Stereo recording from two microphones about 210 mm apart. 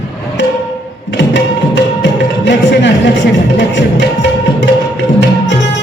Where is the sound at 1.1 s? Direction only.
55° left (ahead or behind).